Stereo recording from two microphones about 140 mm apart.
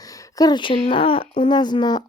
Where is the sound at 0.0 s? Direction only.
25° left (ahead or behind).